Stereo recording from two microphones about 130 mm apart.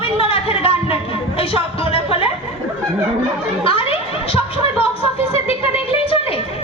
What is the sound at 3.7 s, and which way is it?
Chuckle, 45° left (ahead or behind).